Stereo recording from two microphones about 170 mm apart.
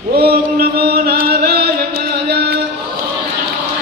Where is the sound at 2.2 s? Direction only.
70° right (ahead or behind).